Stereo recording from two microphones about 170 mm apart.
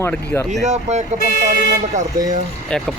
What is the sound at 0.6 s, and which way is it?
Speech, 40° right (ahead or behind).